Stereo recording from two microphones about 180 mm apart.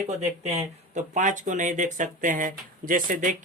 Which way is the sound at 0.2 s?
40° right (ahead or behind).